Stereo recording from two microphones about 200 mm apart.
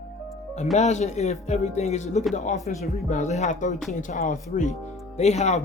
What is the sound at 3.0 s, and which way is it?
Speech, 35° left (ahead or behind).